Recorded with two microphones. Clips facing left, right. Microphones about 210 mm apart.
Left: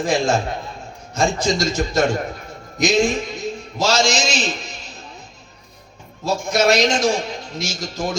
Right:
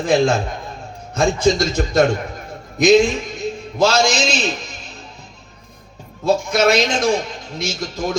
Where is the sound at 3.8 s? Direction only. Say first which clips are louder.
Right 3 dB; 55° right (ahead or behind).